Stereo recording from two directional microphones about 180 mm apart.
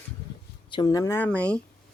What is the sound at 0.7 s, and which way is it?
Speech, 20° left (ahead or behind).